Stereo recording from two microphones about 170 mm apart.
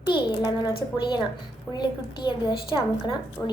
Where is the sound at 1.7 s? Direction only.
25° left (ahead or behind).